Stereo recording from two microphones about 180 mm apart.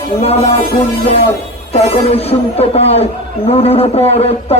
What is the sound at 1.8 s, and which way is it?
A man's voice, 35° left (ahead or behind).